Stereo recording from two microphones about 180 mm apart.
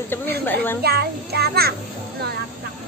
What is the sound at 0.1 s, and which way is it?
Speech, 10° left (ahead or behind).